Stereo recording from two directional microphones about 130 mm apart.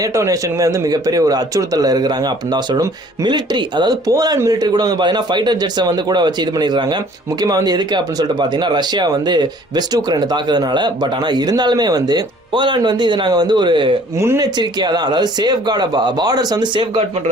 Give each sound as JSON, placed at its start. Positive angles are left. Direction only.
{"t": 0.0, "sound": "speech", "side_deg": -25}
{"t": 14.2, "sound": "speech", "side_deg": -25}